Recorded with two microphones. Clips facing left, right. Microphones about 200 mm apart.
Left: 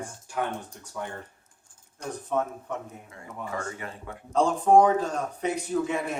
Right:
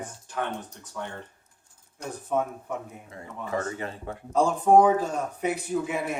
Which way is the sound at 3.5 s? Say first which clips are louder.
Right 7 dB; 30° right (ahead or behind).